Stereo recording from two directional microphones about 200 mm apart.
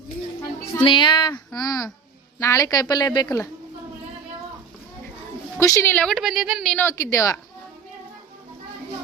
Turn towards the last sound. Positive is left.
turn(degrees=15)  # may be behind; listen again after turning